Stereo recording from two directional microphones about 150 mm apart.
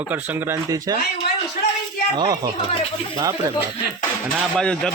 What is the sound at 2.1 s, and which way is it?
Speech, 25° right (ahead or behind).